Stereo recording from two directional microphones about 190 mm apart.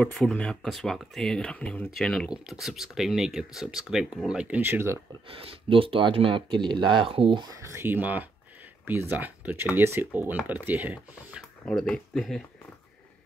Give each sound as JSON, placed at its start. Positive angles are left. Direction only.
{"t": 0.0, "sound": "speech", "side_deg": 5}
{"t": 5.3, "sound": "speech", "side_deg": -30}
{"t": 7.5, "sound": "speech", "side_deg": -15}
{"t": 11.6, "sound": "speech", "side_deg": 5}